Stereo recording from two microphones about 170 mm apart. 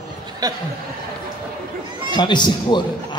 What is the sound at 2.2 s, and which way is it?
Speech, 25° left (ahead or behind).